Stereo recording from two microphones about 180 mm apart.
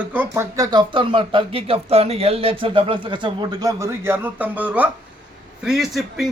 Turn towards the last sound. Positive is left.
turn(degrees=0)  # may be behind; listen again after turning